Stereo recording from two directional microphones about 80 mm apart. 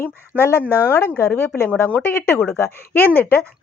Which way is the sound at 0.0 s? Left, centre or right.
Left.